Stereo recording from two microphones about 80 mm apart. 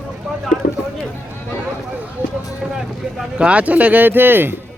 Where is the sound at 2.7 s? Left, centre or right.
Centre; by 4.6 s right.